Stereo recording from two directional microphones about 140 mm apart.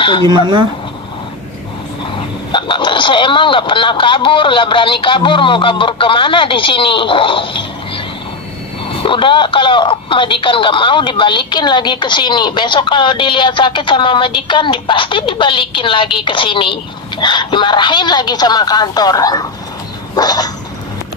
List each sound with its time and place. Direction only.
0.0 s speech: 35° left (ahead or behind)
0.3 s speech: 35° right (ahead or behind)
2.5 s speech: 35° left (ahead or behind)
9.0 s speech: 35° left (ahead or behind)
20.2 s a sound: 30° left (ahead or behind)